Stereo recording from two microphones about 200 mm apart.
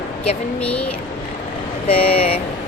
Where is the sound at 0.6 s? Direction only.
5° left (ahead or behind).